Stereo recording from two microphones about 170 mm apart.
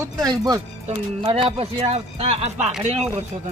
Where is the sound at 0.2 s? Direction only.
25° right (ahead or behind); by 3.1 s 40° right (ahead or behind).